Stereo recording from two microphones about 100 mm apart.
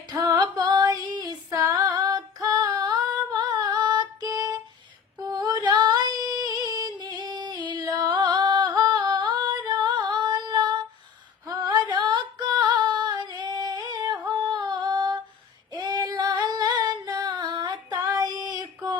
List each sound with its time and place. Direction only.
0.1 s female singing: 40° right (ahead or behind)
17.9 s female singing: 35° right (ahead or behind)